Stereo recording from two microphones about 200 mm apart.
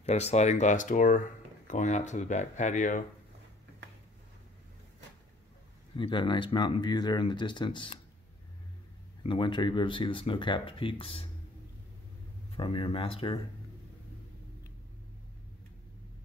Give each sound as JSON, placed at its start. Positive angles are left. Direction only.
{"t": 0.0, "sound": "speech", "side_deg": 35}
{"t": 5.9, "sound": "speech", "side_deg": 25}
{"t": 9.2, "sound": "speech", "side_deg": 25}
{"t": 12.5, "sound": "speech", "side_deg": 25}